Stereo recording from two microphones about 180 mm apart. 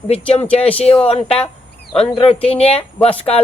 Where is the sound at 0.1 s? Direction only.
35° left (ahead or behind).